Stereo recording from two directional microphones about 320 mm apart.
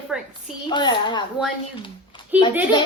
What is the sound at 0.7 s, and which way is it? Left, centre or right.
Speech, centre.